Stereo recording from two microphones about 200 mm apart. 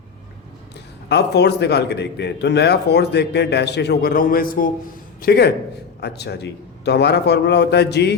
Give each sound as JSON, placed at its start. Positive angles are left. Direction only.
{"t": 1.0, "sound": "a man's voice", "side_deg": 55}
{"t": 5.2, "sound": "a man's voice", "side_deg": 55}